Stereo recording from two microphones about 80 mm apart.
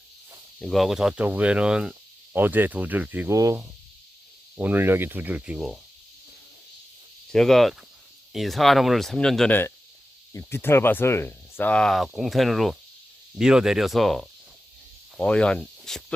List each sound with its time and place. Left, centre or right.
0.7 s speech: centre
1.2 s speech: centre
2.3 s speech: right
3.2 s speech: right
4.5 s speech: right
5.5 s speech: centre
7.3 s speech: centre
9.5 s speech: left
11.7 s speech: centre